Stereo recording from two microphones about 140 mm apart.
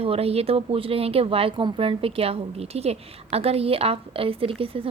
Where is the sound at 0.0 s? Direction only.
45° right (ahead or behind).